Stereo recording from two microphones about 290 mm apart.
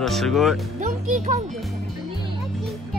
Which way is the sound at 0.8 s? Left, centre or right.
Right.